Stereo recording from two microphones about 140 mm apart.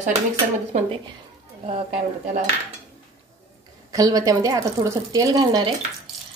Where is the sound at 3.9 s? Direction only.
25° right (ahead or behind).